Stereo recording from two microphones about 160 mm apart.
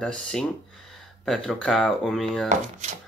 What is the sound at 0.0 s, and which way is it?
Speech, 5° left (ahead or behind).